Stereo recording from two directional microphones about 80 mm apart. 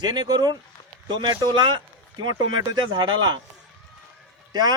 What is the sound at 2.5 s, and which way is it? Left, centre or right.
Speech, right.